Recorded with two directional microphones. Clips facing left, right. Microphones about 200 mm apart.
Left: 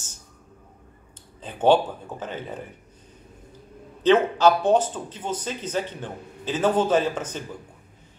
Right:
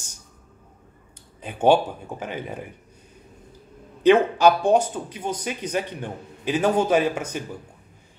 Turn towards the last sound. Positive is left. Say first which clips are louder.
# right 1 dB
turn(degrees=-10)  # may be behind; listen again after turning